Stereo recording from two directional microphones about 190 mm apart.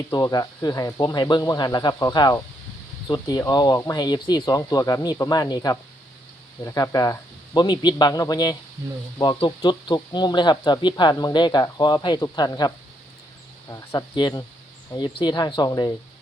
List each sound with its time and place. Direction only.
0.1 s speech: 20° left (ahead or behind)